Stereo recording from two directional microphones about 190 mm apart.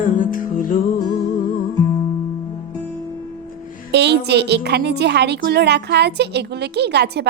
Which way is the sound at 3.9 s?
65° right (ahead or behind).